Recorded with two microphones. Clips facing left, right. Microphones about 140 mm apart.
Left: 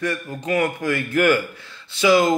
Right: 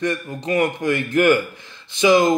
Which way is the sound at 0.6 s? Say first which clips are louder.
Right 3 dB; 15° right (ahead or behind).